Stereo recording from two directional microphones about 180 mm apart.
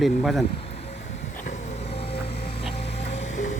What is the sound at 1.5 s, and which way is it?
Vehicle, 35° left (ahead or behind).